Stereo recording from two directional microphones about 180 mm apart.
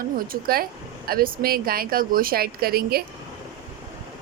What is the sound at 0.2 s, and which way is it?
Speech, 55° right (ahead or behind).